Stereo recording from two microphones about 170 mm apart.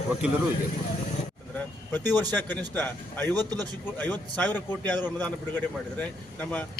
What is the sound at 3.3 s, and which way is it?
Speech, 25° right (ahead or behind).